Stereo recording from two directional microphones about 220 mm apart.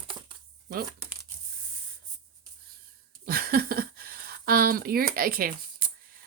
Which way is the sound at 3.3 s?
40° right (ahead or behind).